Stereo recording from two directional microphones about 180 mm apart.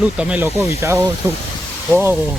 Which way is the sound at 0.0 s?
5° right (ahead or behind).